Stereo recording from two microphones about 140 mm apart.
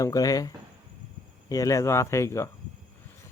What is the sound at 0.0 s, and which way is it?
Speech, 25° left (ahead or behind).